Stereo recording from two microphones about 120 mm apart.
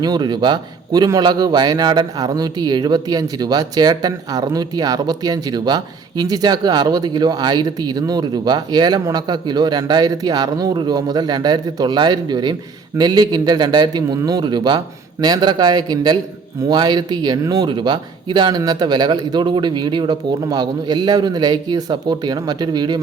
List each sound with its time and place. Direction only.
0.0 s a man's voice: 35° right (ahead or behind)